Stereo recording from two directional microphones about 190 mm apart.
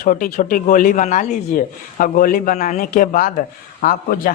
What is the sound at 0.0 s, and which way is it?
Speech, 40° left (ahead or behind).